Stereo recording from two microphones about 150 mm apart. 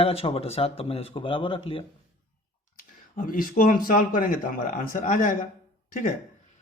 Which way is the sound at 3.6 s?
70° left (ahead or behind).